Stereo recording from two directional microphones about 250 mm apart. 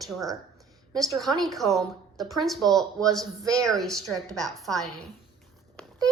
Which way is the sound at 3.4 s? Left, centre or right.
Centre.